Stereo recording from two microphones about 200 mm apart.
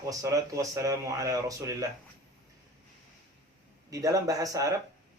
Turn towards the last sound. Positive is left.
turn(degrees=-15)  # may be behind; listen again after turning